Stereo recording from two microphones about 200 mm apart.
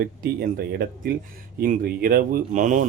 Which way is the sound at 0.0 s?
50° right (ahead or behind).